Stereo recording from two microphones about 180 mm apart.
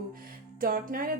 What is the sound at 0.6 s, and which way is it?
Speech, 55° right (ahead or behind).